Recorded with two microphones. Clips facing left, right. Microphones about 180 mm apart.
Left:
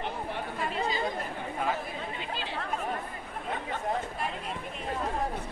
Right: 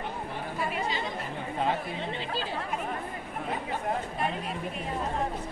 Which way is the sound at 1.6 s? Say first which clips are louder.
Right 3 dB; 30° right (ahead or behind).